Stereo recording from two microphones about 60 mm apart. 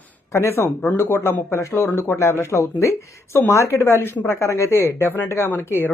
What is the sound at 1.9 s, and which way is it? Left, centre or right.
Speech, left.